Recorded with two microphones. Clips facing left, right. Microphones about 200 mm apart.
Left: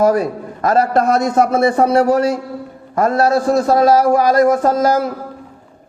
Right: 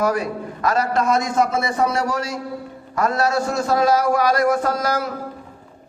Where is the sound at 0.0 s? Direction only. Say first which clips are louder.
Left 7 dB; 50° left (ahead or behind).